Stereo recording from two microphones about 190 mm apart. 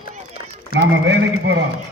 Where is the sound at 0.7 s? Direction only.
65° right (ahead or behind).